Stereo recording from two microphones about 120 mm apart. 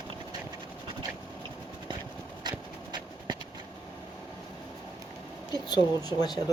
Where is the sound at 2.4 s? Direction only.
40° right (ahead or behind).